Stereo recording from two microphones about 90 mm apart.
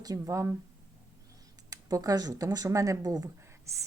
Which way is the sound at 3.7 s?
30° right (ahead or behind).